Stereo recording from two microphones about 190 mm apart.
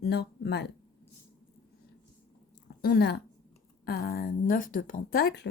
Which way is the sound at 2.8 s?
60° left (ahead or behind).